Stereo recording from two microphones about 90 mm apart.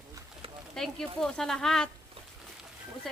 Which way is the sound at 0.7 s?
5° left (ahead or behind).